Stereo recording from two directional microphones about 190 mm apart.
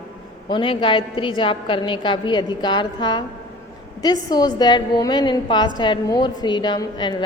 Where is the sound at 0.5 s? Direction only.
25° left (ahead or behind).